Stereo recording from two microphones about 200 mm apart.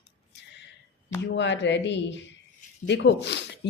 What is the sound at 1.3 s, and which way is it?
A woman's voice, 65° left (ahead or behind).